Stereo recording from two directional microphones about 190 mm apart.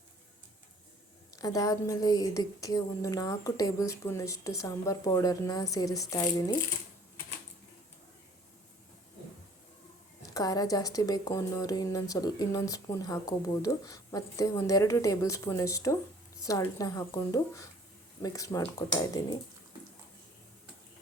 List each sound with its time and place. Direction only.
1.4 s speech: 15° left (ahead or behind)
10.2 s speech: 20° left (ahead or behind)